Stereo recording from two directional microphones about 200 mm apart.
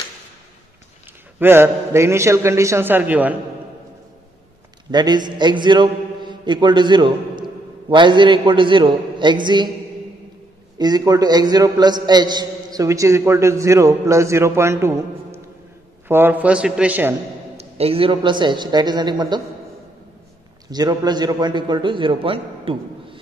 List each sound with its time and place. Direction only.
1.4 s a man's voice: 10° right (ahead or behind)
4.9 s a man's voice: 20° right (ahead or behind)
10.8 s a man's voice: 20° right (ahead or behind)
17.6 s a man's voice: 30° right (ahead or behind)
20.7 s a man's voice: 20° right (ahead or behind)